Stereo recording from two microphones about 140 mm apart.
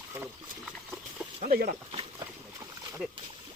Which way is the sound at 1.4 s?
80° right.